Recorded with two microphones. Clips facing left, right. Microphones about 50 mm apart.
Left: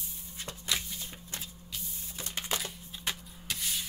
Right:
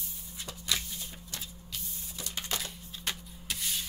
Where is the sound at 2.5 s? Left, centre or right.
Centre.